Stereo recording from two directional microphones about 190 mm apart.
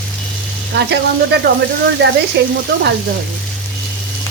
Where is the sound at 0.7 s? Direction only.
60° right (ahead or behind).